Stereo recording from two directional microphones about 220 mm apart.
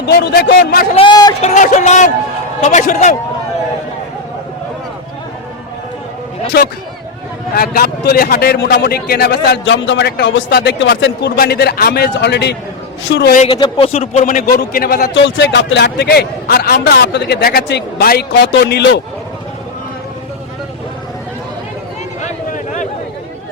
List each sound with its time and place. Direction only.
0.1 s a man's voice: 50° left (ahead or behind)
0.9 s speech: 20° left (ahead or behind)
1.4 s speech: 35° left (ahead or behind)
6.5 s a man's voice: 45° left (ahead or behind)
13.3 s a man's voice: 25° left (ahead or behind); by 19.0 s 50° left (ahead or behind)
22.2 s a sound: 35° left (ahead or behind)